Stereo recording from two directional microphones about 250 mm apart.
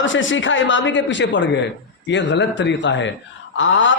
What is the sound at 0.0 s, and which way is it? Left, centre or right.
A man's voice, left.